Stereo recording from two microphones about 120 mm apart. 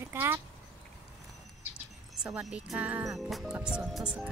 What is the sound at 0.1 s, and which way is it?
Speech, 20° right (ahead or behind).